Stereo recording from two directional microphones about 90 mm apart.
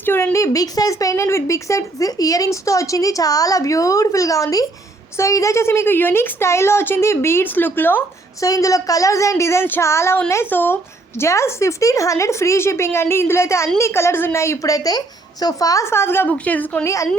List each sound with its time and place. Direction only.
0.0 s a sound: 25° left (ahead or behind)
0.3 s a woman's voice: 40° left (ahead or behind); by 8.0 s 20° left (ahead or behind)
8.4 s a woman's voice: 40° left (ahead or behind); by 10.8 s 20° left (ahead or behind)
11.2 s a woman's voice: 30° left (ahead or behind); by 16.8 s 15° left (ahead or behind)
16.8 s speech: 35° left (ahead or behind)